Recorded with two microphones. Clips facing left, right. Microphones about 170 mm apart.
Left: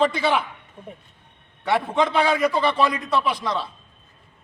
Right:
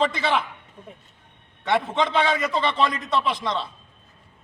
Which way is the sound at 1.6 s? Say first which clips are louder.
Left 1 dB; 5° left (ahead or behind).